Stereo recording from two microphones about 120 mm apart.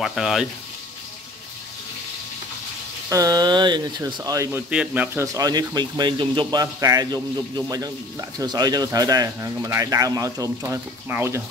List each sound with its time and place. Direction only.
0.0 s speech: centre (ahead or behind)
3.1 s speech: 30° right (ahead or behind)
4.0 s speech: 25° right (ahead or behind)
4.5 s speech: 10° right (ahead or behind)
5.2 s speech: 30° right (ahead or behind)